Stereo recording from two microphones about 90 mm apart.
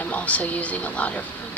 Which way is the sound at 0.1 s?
15° left (ahead or behind).